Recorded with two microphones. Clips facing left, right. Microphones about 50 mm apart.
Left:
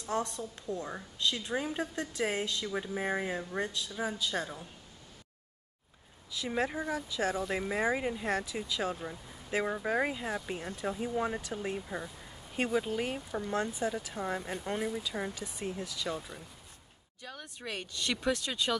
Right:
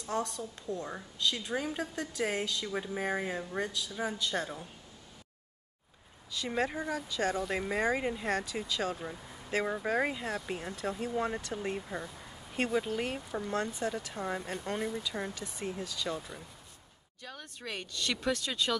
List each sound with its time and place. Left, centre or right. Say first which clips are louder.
0.6 s a woman's voice: even; left
0.8 s a woman's voice: right 1 dB; centre
2.6 s speech: even; centre
6.3 s speech: even; centre
13.5 s speech: left 1 dB; centre